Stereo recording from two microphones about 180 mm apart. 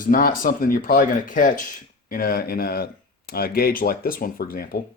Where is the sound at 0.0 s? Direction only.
50° left (ahead or behind).